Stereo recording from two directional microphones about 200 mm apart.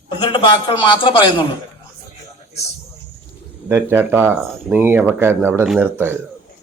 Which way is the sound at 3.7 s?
10° right (ahead or behind).